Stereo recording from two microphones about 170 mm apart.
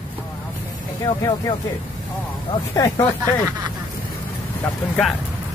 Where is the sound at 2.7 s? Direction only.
20° left (ahead or behind).